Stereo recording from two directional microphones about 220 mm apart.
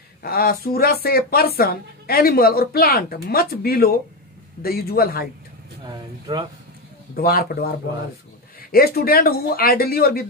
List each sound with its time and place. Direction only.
0.2 s speech: 45° left (ahead or behind)
5.9 s speech: 20° right (ahead or behind)
7.2 s speech: 45° left (ahead or behind)
8.7 s speech: 45° left (ahead or behind)